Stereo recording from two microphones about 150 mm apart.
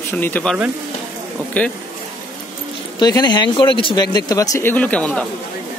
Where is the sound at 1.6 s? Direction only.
10° left (ahead or behind).